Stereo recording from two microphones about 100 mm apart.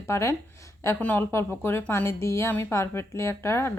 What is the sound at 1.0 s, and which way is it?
Speech, 15° left (ahead or behind).